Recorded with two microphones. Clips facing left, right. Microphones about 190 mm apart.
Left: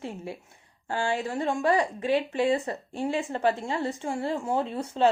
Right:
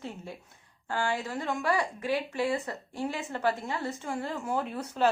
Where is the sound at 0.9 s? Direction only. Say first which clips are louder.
Left 3 dB; 20° left (ahead or behind).